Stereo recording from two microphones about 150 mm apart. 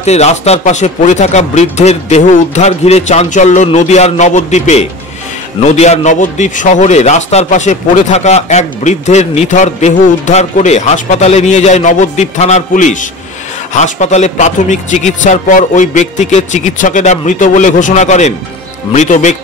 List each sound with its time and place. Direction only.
0.0 s a man's voice: 45° left (ahead or behind)